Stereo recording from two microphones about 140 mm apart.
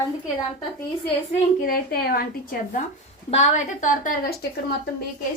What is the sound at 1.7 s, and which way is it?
Speech, 90° left.